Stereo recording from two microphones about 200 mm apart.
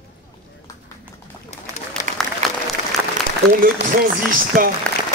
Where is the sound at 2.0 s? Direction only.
35° left (ahead or behind).